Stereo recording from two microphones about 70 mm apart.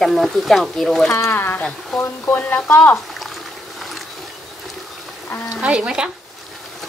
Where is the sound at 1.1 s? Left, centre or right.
Left.